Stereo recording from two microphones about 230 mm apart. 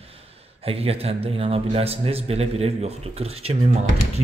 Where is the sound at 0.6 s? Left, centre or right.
Right.